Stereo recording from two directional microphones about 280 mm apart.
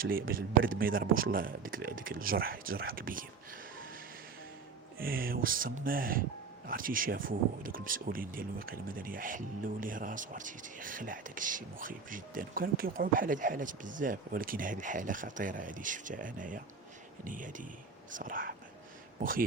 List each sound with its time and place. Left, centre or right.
0.0 s speech: right
4.9 s speech: right